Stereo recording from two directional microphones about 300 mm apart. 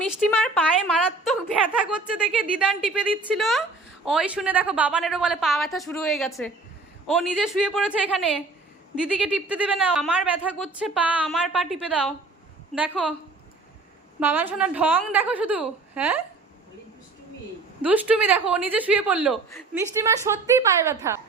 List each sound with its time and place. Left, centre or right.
0.1 s a woman's voice: centre
14.2 s a woman's voice: centre
17.8 s a woman's voice: centre